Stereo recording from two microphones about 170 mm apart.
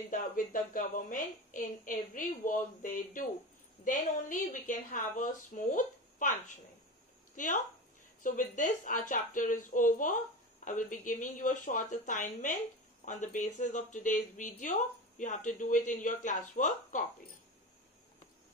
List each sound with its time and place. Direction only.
0.1 s a woman's voice: 50° left (ahead or behind)